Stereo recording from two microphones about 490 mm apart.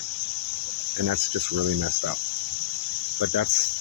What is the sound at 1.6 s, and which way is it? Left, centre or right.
Speech, right.